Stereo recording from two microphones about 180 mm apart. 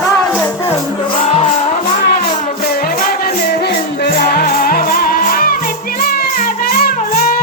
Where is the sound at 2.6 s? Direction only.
55° left (ahead or behind).